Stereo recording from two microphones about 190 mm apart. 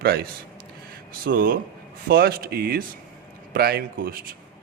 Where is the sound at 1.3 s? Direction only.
50° right (ahead or behind).